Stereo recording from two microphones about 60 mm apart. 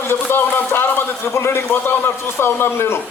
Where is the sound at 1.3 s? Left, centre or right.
Left.